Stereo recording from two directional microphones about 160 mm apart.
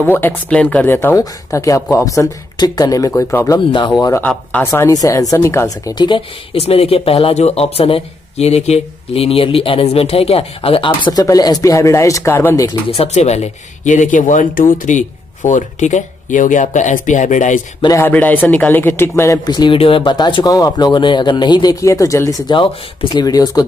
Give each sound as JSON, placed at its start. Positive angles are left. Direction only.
{"t": 0.0, "sound": "speech", "side_deg": 10}
{"t": 4.2, "sound": "speech", "side_deg": 10}
{"t": 5.9, "sound": "speech", "side_deg": 30}
{"t": 12.9, "sound": "speech", "side_deg": 40}
{"t": 17.8, "sound": "speech", "side_deg": 15}